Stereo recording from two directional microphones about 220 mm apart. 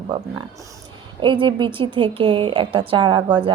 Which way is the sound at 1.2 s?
20° right (ahead or behind).